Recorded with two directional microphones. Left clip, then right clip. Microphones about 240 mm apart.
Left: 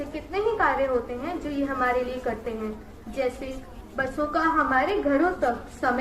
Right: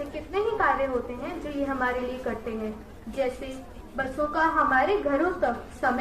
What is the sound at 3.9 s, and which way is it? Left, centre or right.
A woman's voice, centre.